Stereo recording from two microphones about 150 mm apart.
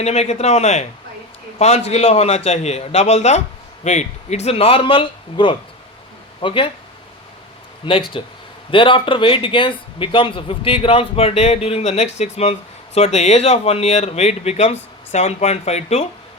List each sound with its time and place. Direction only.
0.0 s a man's voice: 45° left (ahead or behind)
7.9 s a man's voice: 35° left (ahead or behind)